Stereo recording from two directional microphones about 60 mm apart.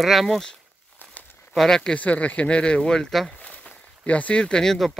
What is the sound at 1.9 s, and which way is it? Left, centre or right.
Speech, left.